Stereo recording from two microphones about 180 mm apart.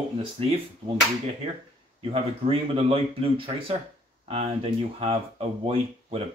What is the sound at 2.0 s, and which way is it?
Speech, 30° right (ahead or behind).